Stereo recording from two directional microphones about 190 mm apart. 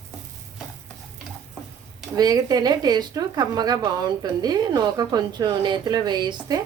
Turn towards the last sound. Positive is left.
turn(degrees=-20)  # may be behind; listen again after turning